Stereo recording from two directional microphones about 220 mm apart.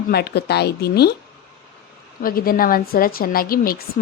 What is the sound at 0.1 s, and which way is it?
Speech, 45° left (ahead or behind).